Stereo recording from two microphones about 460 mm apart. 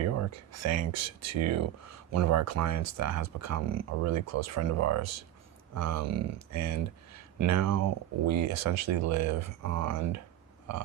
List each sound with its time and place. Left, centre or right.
0.0 s speech: right